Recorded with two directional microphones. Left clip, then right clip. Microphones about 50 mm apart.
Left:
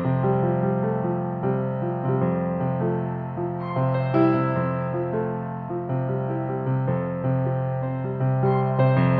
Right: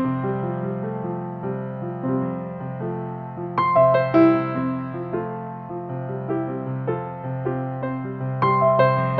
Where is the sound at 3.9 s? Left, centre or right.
Centre.